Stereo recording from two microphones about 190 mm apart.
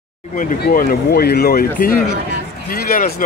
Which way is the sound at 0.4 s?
50° left (ahead or behind).